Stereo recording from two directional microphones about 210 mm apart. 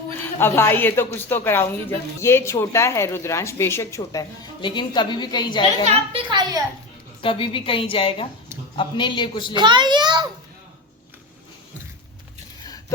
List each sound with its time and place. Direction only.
0.3 s speech: 10° left (ahead or behind)
5.8 s a child's voice: 25° right (ahead or behind)
7.2 s a woman's voice: 25° left (ahead or behind)
9.6 s a child's voice: 20° right (ahead or behind)